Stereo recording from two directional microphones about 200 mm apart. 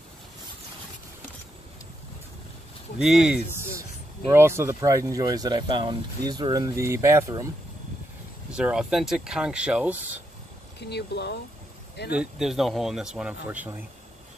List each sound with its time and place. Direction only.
3.0 s speech: 5° right (ahead or behind)
8.5 s speech: 5° right (ahead or behind)
10.8 s speech: 55° left (ahead or behind)
12.1 s speech: 5° right (ahead or behind)